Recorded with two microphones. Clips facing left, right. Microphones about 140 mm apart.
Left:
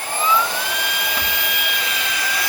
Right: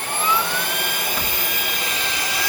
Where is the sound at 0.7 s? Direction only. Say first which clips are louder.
Left 1 dB; 50° right (ahead or behind).